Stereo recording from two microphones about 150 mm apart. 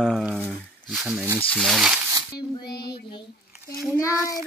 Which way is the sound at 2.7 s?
90° left.